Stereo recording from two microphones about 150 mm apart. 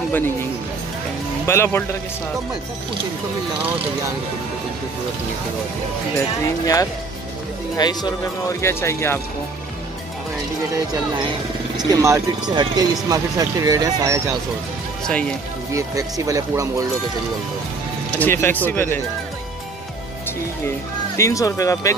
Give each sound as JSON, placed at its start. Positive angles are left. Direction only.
{"t": 1.4, "sound": "speech", "side_deg": 15}
{"t": 6.6, "sound": "speech", "side_deg": 25}
{"t": 11.7, "sound": "speech", "side_deg": -25}
{"t": 15.0, "sound": "speech", "side_deg": 5}
{"t": 15.7, "sound": "speech", "side_deg": -20}
{"t": 18.2, "sound": "speech", "side_deg": 15}
{"t": 21.2, "sound": "speech", "side_deg": 20}